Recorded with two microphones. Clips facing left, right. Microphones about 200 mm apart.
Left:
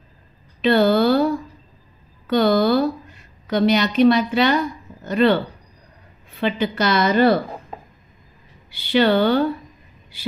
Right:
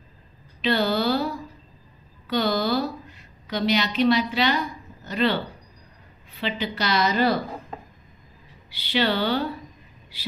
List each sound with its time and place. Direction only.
0.6 s speech: 50° left (ahead or behind)
2.2 s music: 50° left (ahead or behind)
3.4 s a woman's voice: 50° left (ahead or behind)
6.4 s a woman's voice: 50° left (ahead or behind)
8.7 s a woman's voice: 50° left (ahead or behind)